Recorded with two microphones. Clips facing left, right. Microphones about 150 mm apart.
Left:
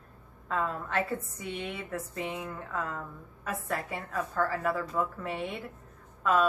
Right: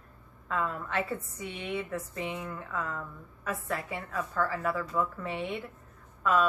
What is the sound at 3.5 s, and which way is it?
A woman's voice, 40° left (ahead or behind).